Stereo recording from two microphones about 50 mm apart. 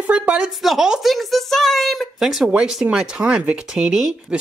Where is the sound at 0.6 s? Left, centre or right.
Centre.